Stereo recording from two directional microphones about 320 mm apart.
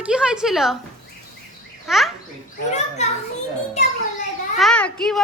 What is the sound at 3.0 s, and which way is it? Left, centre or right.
Speech, left.